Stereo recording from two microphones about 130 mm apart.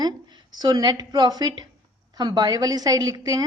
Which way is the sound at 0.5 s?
30° right (ahead or behind).